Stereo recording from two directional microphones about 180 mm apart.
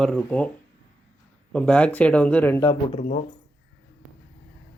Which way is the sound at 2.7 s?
40° left (ahead or behind).